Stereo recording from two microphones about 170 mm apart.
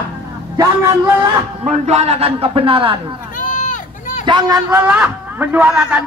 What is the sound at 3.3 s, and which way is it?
Run, 50° left (ahead or behind).